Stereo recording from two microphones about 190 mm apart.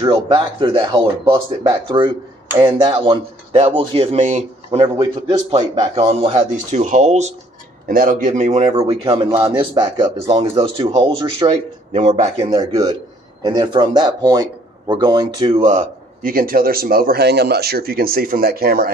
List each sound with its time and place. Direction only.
0.0 s a man's voice: 25° right (ahead or behind)
6.2 s a man's voice: 35° right (ahead or behind)
12.4 s a man's voice: 20° right (ahead or behind); by 18.9 s 55° right (ahead or behind)